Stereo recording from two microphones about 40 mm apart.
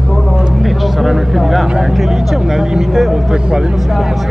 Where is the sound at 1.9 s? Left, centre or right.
Centre.